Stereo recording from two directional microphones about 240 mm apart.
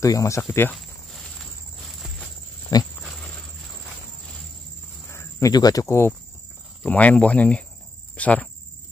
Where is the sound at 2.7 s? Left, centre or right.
Centre.